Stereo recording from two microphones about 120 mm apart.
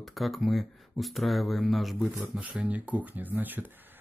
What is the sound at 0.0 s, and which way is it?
Speech, centre (ahead or behind).